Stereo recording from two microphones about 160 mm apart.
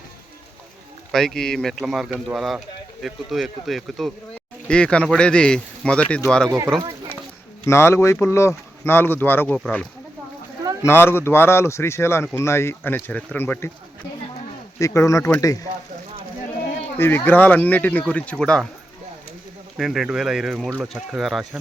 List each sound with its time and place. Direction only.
1.1 s speech: centre (ahead or behind)
7.6 s speech: 15° left (ahead or behind)
10.8 s speech: 15° left (ahead or behind)
14.8 s speech: 20° left (ahead or behind)
17.0 s speech: 10° left (ahead or behind)
19.7 s speech: centre (ahead or behind)